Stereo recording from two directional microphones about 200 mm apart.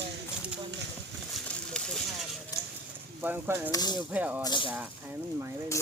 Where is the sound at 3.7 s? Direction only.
20° left (ahead or behind).